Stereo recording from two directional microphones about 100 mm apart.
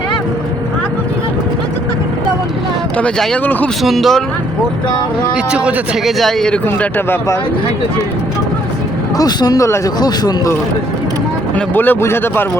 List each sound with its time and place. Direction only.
3.0 s speech: 10° left (ahead or behind)
3.8 s speech: centre (ahead or behind)
5.5 s speech: 10° right (ahead or behind)
6.1 s speech: centre (ahead or behind)
6.7 s speech: 20° left (ahead or behind)
9.1 s speech: 40° left (ahead or behind)
9.6 s speech: 25° left (ahead or behind)
10.0 s speech: 40° left (ahead or behind)
11.5 s speech: 20° left (ahead or behind)